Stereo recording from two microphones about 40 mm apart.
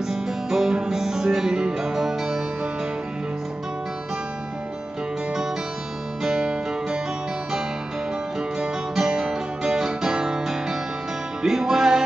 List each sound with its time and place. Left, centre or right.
0.1 s music: centre
6.2 s music: centre
8.9 s music: centre